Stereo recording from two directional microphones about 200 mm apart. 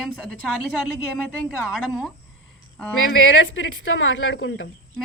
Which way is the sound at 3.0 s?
85° left.